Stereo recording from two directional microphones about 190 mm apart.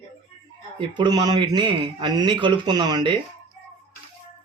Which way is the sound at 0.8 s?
25° right (ahead or behind).